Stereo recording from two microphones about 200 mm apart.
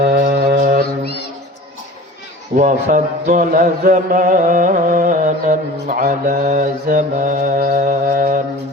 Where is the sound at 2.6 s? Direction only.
40° right (ahead or behind).